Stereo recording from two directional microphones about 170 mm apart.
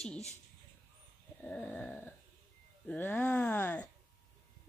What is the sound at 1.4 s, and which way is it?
Speech, 10° left (ahead or behind).